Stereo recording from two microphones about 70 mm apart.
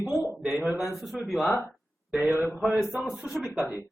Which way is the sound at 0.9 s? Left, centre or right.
Centre.